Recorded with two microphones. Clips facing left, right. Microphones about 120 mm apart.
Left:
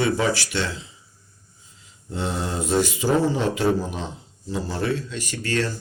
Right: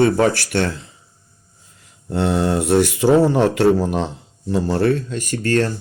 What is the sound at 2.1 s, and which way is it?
Speech, 65° right (ahead or behind).